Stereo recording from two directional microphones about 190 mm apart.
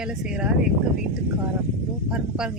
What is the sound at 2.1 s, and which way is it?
Speech, 5° right (ahead or behind).